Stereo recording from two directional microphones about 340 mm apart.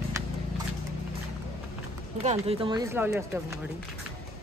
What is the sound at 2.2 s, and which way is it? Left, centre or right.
Speech, centre.